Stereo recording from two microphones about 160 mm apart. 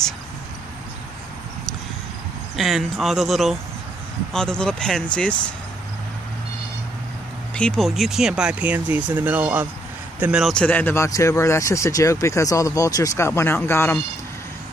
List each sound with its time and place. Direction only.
2.5 s speech: centre (ahead or behind)
7.5 s speech: 5° left (ahead or behind)
10.5 s speech: 10° left (ahead or behind)